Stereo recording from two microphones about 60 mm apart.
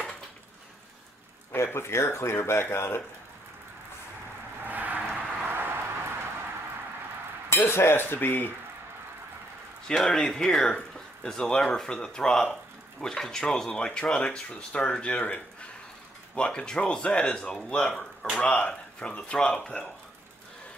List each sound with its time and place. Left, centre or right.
1.5 s speech: left
4.6 s a sound: right
7.4 s speech: left
9.8 s a man's voice: centre